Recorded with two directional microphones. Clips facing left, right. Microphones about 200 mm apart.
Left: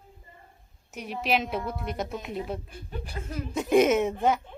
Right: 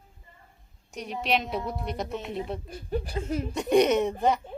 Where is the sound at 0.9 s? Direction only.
5° left (ahead or behind).